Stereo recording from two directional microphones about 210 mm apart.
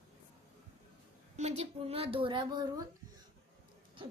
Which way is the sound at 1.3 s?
30° right (ahead or behind).